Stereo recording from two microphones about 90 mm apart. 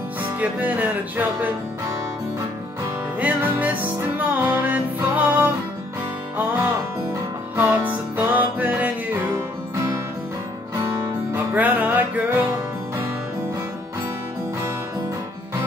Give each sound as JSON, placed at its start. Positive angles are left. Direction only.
{"t": 0.4, "sound": "music", "side_deg": -20}
{"t": 3.2, "sound": "music", "side_deg": -20}
{"t": 7.5, "sound": "music", "side_deg": -20}
{"t": 11.3, "sound": "music", "side_deg": -20}